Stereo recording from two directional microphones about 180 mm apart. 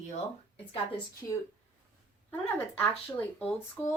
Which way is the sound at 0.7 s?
30° left (ahead or behind).